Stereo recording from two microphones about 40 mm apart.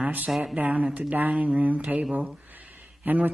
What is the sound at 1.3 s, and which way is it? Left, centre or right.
Speech, right.